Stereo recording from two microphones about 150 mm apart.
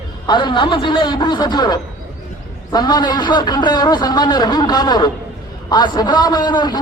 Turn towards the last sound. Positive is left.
turn(degrees=30)  # may be behind; listen again after turning